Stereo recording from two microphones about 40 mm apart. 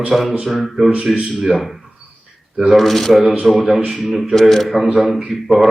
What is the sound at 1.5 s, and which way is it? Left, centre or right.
Speech, centre.